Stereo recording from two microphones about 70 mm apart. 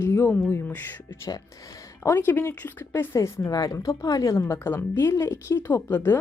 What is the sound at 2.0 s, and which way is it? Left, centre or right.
A woman's voice, left.